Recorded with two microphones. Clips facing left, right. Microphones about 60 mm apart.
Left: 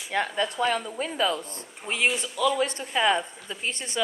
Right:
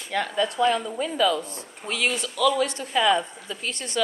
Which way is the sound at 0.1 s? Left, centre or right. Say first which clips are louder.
Right 2 dB; left.